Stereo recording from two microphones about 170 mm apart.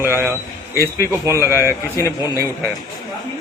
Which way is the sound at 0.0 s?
15° right (ahead or behind).